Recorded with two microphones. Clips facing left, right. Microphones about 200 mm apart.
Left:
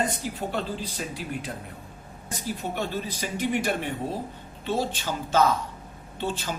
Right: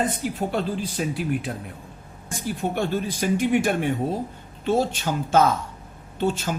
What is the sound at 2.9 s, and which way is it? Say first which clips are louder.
A man's voice: right 7 dB; 50° right (ahead or behind).